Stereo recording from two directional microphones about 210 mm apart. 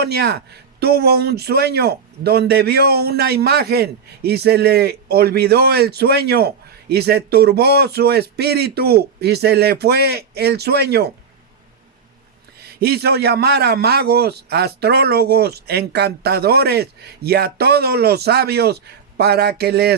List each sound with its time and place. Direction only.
0.0 s speech: 50° right (ahead or behind)
12.5 s speech: 50° right (ahead or behind)